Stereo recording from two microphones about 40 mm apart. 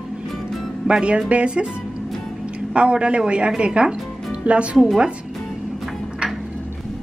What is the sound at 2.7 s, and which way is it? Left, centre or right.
A woman's voice, right.